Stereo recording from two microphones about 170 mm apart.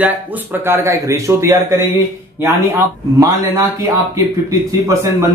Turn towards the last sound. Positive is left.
turn(degrees=-20)  # may be behind; listen again after turning